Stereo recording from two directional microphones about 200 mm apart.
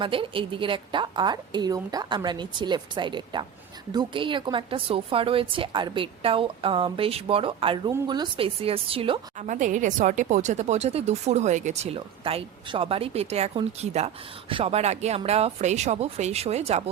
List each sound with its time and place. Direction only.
0.0 s a woman's voice: 25° right (ahead or behind)